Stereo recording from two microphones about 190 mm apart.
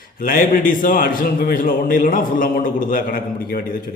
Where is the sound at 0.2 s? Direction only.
50° left (ahead or behind).